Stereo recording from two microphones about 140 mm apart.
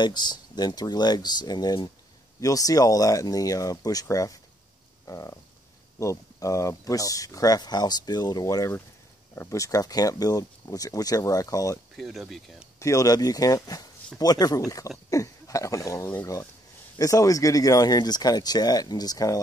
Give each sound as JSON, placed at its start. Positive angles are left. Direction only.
{"t": 0.0, "sound": "speech", "side_deg": 30}
{"t": 5.0, "sound": "frog", "side_deg": 25}
{"t": 5.9, "sound": "speech", "side_deg": 20}
{"t": 12.0, "sound": "speech", "side_deg": 0}
{"t": 12.7, "sound": "speech", "side_deg": 20}